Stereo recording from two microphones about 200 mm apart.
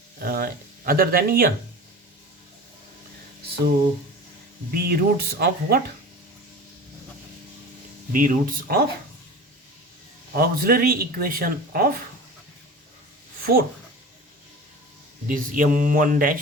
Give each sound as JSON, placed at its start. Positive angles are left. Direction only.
{"t": 0.2, "sound": "speech", "side_deg": -50}
{"t": 4.7, "sound": "speech", "side_deg": -50}
{"t": 8.1, "sound": "speech", "side_deg": -45}
{"t": 10.3, "sound": "speech", "side_deg": -50}
{"t": 13.4, "sound": "speech", "side_deg": -45}
{"t": 15.3, "sound": "mantra", "side_deg": -40}